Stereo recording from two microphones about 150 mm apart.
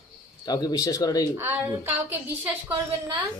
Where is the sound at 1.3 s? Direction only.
15° right (ahead or behind).